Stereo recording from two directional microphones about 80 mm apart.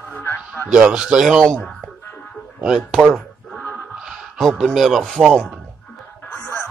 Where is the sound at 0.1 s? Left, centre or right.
Left.